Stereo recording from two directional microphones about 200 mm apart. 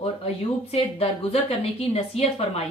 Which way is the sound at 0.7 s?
30° left (ahead or behind).